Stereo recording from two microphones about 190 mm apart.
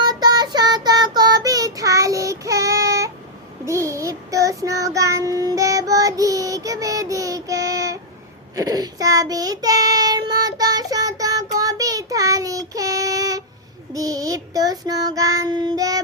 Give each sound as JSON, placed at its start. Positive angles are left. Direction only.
{"t": 0.0, "sound": "child singing", "side_deg": -20}